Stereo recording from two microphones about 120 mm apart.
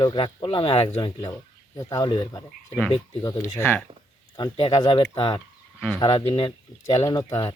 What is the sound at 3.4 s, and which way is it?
Speech, 20° left (ahead or behind).